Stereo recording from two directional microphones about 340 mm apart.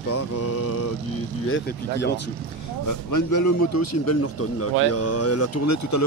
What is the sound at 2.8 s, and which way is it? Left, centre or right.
A man's voice, left.